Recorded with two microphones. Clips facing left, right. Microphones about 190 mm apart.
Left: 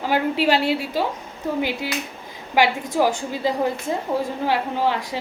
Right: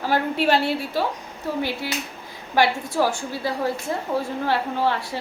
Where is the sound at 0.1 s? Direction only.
15° left (ahead or behind).